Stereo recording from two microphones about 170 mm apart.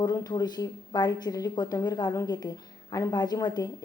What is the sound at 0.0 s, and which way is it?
Speech, 20° left (ahead or behind).